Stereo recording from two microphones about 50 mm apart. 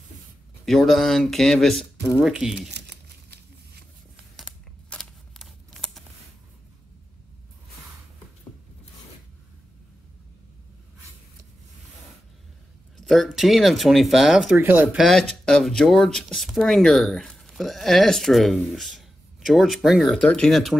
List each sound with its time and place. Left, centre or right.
0.7 s speech: centre
2.2 s speech: centre
4.8 s a sound: centre
12.9 s a sound: centre
13.3 s speech: centre
14.6 s speech: right
15.0 s speech: centre
16.3 s speech: centre
16.6 s speech: centre